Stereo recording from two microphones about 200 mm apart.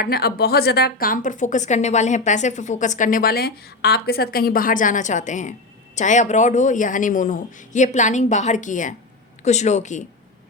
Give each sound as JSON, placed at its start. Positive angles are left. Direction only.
{"t": 0.0, "sound": "a woman's voice", "side_deg": 50}